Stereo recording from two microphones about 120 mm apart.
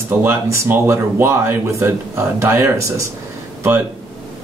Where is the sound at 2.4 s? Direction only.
25° right (ahead or behind).